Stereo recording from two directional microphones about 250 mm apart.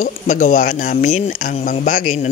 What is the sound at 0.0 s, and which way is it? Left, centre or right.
A man's voice, left.